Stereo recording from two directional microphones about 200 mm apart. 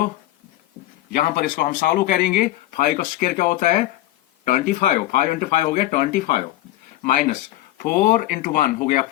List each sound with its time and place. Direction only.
1.1 s speech: 45° left (ahead or behind)